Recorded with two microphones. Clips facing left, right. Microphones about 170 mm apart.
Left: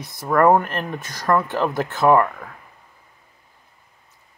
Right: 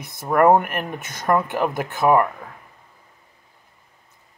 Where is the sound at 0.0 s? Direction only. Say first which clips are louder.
Even; 20° right (ahead or behind).